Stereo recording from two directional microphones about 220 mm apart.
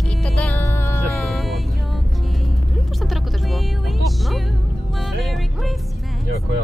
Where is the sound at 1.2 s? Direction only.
Centre (ahead or behind).